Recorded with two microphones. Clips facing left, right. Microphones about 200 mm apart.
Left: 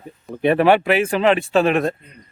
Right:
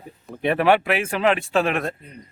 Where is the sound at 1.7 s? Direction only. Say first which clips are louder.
Left 6 dB; 35° left (ahead or behind).